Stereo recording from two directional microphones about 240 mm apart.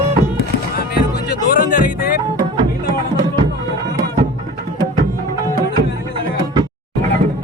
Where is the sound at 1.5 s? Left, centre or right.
Left.